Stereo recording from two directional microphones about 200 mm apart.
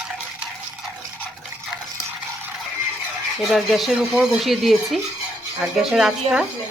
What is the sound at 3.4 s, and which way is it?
Speech, centre (ahead or behind).